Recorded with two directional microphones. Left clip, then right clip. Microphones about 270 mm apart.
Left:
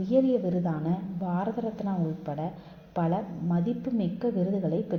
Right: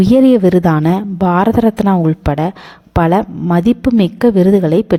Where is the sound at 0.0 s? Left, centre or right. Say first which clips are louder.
Right 15 dB; right.